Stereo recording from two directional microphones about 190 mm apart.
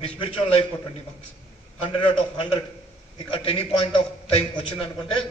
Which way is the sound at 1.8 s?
25° left (ahead or behind).